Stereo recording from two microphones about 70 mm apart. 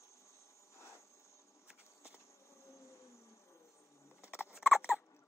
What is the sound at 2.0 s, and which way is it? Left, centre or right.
Insect, left.